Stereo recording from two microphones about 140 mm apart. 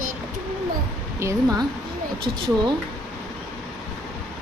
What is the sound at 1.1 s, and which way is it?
Speech, 25° right (ahead or behind).